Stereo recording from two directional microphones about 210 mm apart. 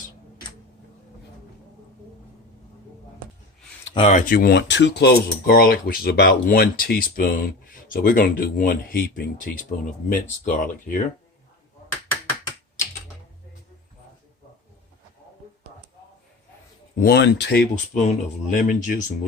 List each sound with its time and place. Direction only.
3.9 s speech: 30° left (ahead or behind)
17.0 s speech: 50° left (ahead or behind)
17.9 s speech: 30° left (ahead or behind)